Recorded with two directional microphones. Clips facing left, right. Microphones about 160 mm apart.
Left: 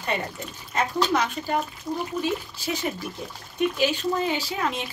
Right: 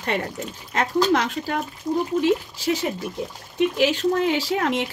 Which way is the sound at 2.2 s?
90° right.